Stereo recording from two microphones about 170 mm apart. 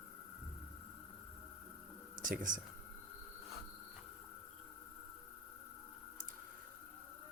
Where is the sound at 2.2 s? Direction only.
50° right (ahead or behind).